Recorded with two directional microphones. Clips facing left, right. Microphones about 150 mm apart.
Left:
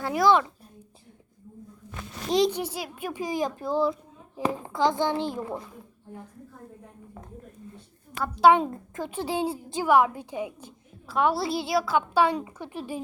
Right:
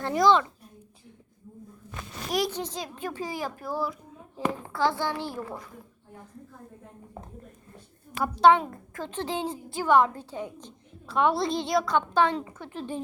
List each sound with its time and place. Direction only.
0.0 s a child's voice: 10° left (ahead or behind)
2.3 s a child's voice: 20° left (ahead or behind)
2.6 s a woman's voice: 10° left (ahead or behind)
8.5 s a woman's voice: 15° left (ahead or behind)